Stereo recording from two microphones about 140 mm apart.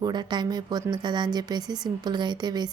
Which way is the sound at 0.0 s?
30° right (ahead or behind).